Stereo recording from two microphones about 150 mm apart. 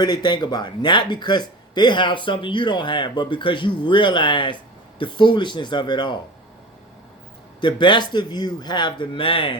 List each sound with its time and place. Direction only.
0.0 s speech: 30° left (ahead or behind)
7.6 s a man's voice: 30° left (ahead or behind)